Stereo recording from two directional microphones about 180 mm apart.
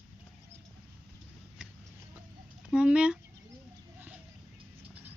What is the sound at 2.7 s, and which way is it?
Chicken, 5° right (ahead or behind).